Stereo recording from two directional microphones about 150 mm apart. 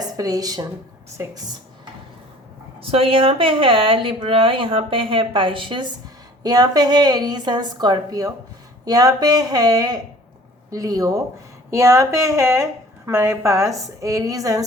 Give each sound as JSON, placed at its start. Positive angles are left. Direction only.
{"t": 0.2, "sound": "a woman's voice", "side_deg": -25}
{"t": 2.8, "sound": "a woman's voice", "side_deg": -40}